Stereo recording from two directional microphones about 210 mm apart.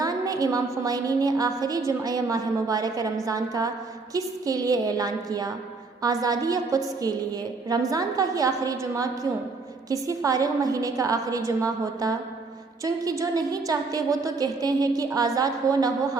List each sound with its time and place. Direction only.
0.0 s a woman's voice: 15° right (ahead or behind)